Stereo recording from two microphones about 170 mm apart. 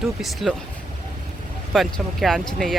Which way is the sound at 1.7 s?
Centre (ahead or behind).